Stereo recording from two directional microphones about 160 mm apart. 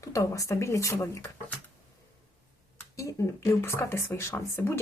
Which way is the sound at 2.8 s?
20° left (ahead or behind).